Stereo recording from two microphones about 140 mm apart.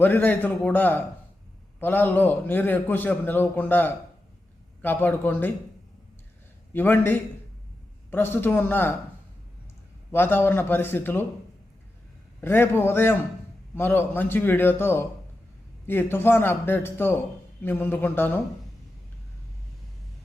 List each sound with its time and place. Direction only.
0.0 s a man's voice: 15° left (ahead or behind)
6.7 s a man's voice: 15° left (ahead or behind)
10.1 s a man's voice: 15° left (ahead or behind)
12.4 s a man's voice: 15° left (ahead or behind)